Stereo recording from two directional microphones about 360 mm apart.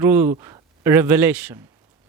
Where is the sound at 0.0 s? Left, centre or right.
Centre.